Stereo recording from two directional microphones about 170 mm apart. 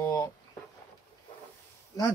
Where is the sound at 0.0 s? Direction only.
20° left (ahead or behind).